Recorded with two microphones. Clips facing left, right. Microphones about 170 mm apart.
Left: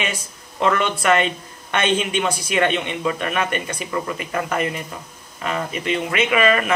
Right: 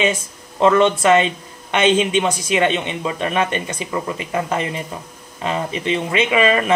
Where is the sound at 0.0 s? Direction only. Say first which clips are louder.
Right 8 dB; 25° right (ahead or behind).